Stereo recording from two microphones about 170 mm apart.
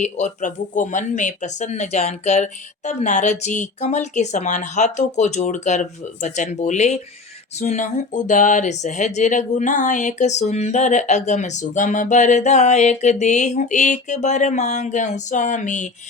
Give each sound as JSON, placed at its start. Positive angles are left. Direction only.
{"t": 0.0, "sound": "speech", "side_deg": 45}